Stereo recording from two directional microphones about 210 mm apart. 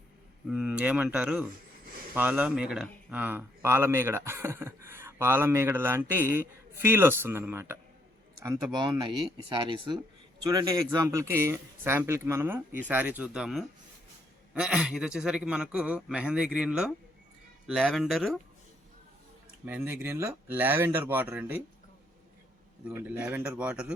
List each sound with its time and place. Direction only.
0.4 s speech: 5° right (ahead or behind)
19.6 s speech: 10° right (ahead or behind)
22.9 s speech: 10° right (ahead or behind)